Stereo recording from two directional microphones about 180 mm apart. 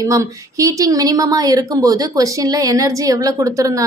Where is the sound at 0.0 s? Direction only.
15° right (ahead or behind).